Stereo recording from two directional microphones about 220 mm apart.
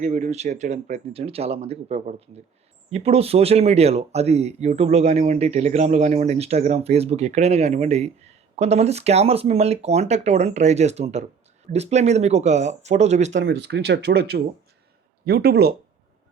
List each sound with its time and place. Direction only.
0.0 s speech: 30° right (ahead or behind)
13.4 s speech: 50° right (ahead or behind)